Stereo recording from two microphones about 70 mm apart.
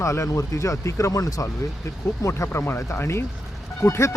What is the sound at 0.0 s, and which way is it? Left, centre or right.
Speech, left.